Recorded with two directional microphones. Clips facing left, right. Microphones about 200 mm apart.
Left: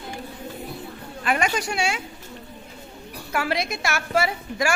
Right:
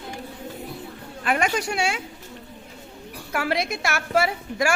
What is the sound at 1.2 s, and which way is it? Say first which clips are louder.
Speech: right 1 dB; 55° right (ahead or behind).